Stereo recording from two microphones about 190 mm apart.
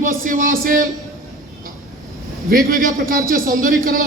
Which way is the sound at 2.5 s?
45° right (ahead or behind).